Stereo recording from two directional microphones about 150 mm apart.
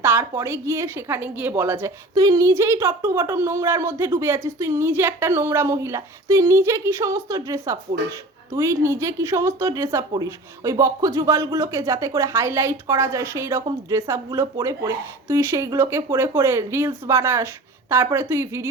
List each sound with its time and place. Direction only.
0.0 s a woman's voice: 15° right (ahead or behind)